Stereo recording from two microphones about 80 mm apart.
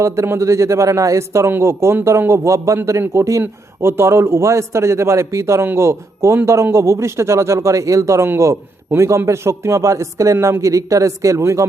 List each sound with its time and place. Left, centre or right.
0.0 s a man's voice: right